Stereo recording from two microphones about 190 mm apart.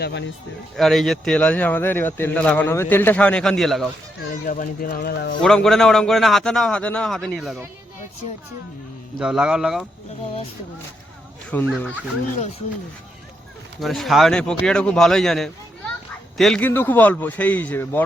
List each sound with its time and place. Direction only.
0.0 s speech: 65° left (ahead or behind)
0.8 s speech: centre (ahead or behind)
4.4 s speech: 45° left (ahead or behind)
5.4 s a man's voice: 5° left (ahead or behind)
9.1 s a man's voice: 5° right (ahead or behind)
11.5 s speech: 10° left (ahead or behind)
13.7 s a man's voice: centre (ahead or behind)